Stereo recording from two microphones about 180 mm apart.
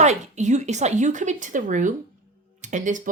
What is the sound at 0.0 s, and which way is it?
Speech, 40° right (ahead or behind).